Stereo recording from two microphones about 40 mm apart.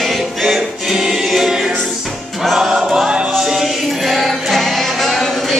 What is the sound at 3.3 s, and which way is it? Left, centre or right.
Music, centre.